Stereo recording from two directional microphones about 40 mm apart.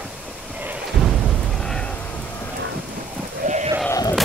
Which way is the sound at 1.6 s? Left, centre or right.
Centre.